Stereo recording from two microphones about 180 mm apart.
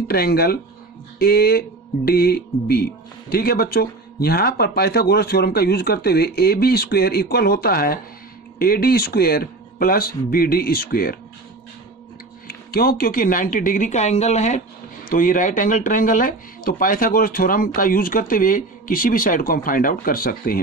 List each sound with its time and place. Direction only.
0.1 s speech: 60° left (ahead or behind)
12.4 s speech: 55° left (ahead or behind)